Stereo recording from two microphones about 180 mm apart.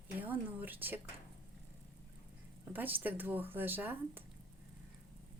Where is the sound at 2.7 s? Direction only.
10° right (ahead or behind).